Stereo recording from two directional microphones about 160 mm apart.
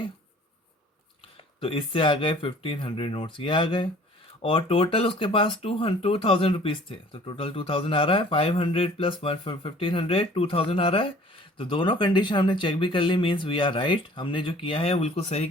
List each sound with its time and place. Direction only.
1.6 s speech: 35° left (ahead or behind)